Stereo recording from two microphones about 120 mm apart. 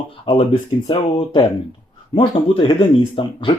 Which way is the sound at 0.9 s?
45° left (ahead or behind).